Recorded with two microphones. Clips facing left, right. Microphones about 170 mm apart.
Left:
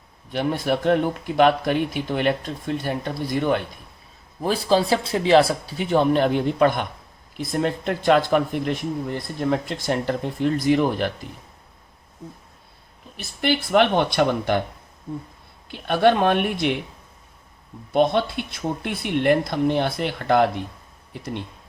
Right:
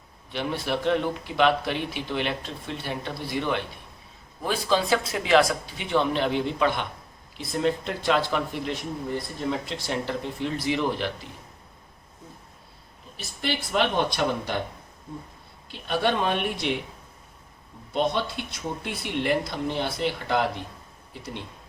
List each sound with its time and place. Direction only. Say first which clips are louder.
0.3 s speech: left 5 dB; 50° left (ahead or behind)
4.4 s speech: left 4 dB; 35° left (ahead or behind)
13.4 s speech: left 7 dB; 60° left (ahead or behind)
15.9 s speech: left 7 dB; 60° left (ahead or behind)
17.9 s speech: left 6 dB; 55° left (ahead or behind)